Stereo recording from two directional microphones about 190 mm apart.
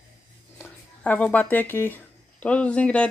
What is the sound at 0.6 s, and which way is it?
Speech, 10° left (ahead or behind).